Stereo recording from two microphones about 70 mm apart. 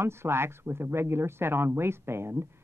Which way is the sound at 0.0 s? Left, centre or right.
Right.